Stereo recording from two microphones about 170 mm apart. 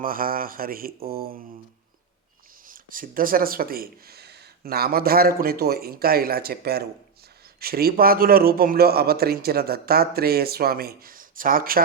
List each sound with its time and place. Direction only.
0.0 s speech: 55° right (ahead or behind)
2.6 s speech: 55° right (ahead or behind)